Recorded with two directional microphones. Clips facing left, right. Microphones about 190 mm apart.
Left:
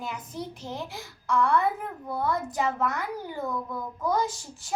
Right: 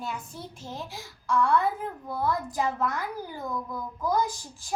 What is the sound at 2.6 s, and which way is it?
Speech, 70° left (ahead or behind).